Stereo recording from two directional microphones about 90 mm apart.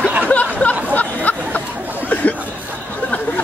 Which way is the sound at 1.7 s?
20° right (ahead or behind).